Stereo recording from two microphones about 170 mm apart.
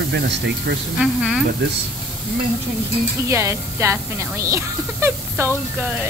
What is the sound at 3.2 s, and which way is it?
Speech, 15° right (ahead or behind).